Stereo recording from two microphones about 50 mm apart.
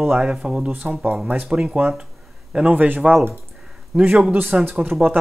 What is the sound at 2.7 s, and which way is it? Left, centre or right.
Speech, right.